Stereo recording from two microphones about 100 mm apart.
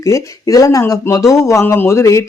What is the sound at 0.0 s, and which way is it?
Speech, 35° left (ahead or behind).